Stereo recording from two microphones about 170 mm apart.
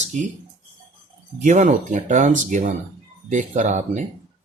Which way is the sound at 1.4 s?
45° right (ahead or behind).